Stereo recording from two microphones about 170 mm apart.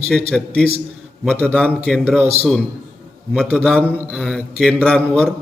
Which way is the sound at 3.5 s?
5° right (ahead or behind).